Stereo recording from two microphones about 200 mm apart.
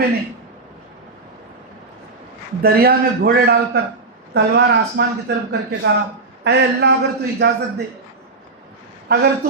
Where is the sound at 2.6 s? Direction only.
50° right (ahead or behind).